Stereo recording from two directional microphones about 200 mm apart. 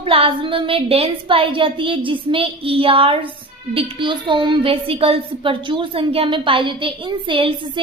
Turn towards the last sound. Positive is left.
turn(degrees=-25)  # may be behind; listen again after turning